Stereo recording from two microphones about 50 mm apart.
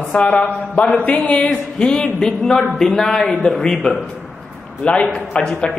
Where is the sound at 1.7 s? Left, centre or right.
Centre.